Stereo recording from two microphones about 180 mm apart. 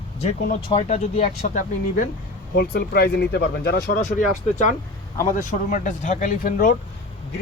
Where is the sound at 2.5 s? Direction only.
65° left (ahead or behind).